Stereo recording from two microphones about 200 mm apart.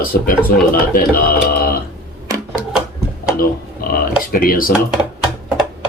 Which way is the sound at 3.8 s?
50° left (ahead or behind).